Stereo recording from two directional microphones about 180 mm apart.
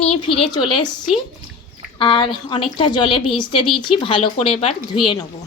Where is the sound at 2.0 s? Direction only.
30° left (ahead or behind).